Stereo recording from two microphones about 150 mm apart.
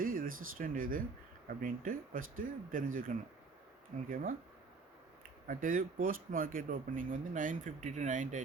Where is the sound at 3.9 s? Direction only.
55° right (ahead or behind).